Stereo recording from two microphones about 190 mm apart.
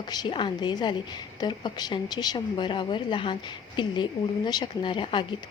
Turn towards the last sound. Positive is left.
turn(degrees=25)  # may be behind; listen again after turning